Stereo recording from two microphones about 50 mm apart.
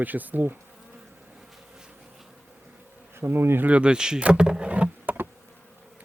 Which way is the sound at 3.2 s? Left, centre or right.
Right.